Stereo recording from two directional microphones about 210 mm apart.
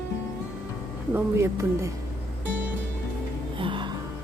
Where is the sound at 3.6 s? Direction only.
25° right (ahead or behind).